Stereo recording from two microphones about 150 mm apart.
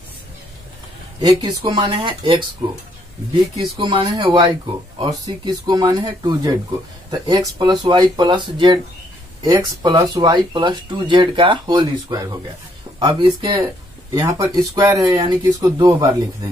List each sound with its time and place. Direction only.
1.2 s speech: 30° right (ahead or behind)
3.7 s speech: 35° right (ahead or behind)